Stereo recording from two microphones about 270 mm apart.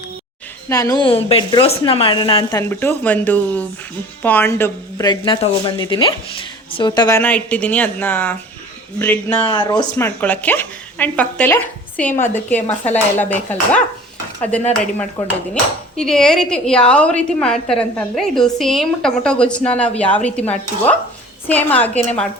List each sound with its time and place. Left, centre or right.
0.7 s a woman's voice: centre
9.5 s a woman's voice: centre
16.0 s a woman's voice: centre